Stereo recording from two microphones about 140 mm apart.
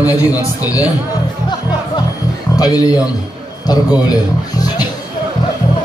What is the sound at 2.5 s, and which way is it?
A man's voice, 25° left (ahead or behind).